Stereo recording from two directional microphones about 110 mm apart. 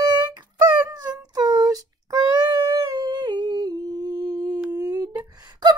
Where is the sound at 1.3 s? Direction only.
35° right (ahead or behind).